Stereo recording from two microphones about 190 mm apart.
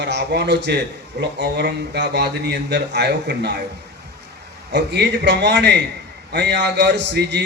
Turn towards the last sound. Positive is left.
turn(degrees=-65)  # may be behind; listen again after turning